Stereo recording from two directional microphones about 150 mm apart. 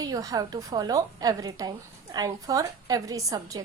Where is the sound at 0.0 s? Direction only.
25° right (ahead or behind).